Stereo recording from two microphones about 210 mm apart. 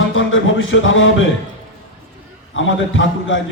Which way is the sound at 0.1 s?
70° left (ahead or behind).